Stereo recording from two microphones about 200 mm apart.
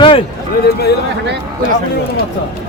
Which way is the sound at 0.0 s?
25° left (ahead or behind).